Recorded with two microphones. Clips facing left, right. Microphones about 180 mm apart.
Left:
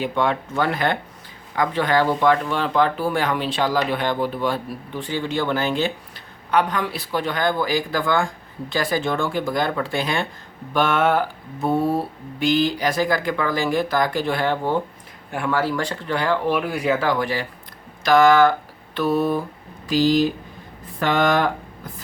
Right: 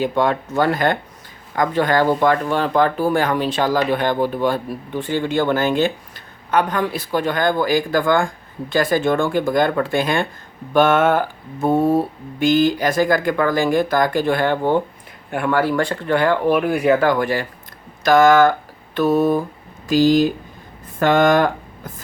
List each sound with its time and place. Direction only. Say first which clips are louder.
0.0 s speech: right 3 dB; 40° right (ahead or behind)